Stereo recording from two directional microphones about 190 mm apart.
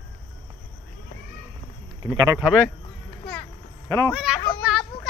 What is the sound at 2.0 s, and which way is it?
Speech, 15° right (ahead or behind).